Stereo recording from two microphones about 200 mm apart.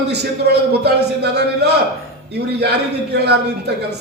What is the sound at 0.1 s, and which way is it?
A man's voice, 55° right (ahead or behind).